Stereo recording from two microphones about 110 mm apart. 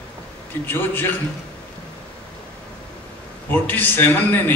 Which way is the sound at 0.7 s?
20° left (ahead or behind).